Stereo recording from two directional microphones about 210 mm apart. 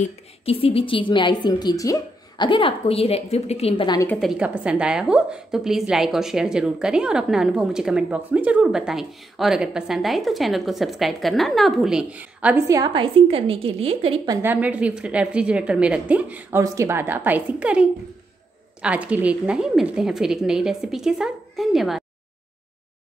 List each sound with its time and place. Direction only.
0.0 s a woman's voice: 25° left (ahead or behind)
4.1 s a woman's voice: centre (ahead or behind)